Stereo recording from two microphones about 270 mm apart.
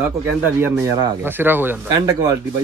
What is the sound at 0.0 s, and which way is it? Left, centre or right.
Speech, centre.